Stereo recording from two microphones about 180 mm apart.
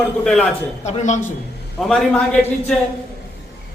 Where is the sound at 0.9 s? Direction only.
40° left (ahead or behind).